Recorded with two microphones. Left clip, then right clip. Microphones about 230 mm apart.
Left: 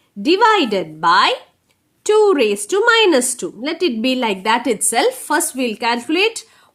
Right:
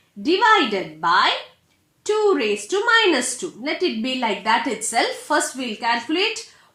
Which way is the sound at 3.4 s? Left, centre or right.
Left.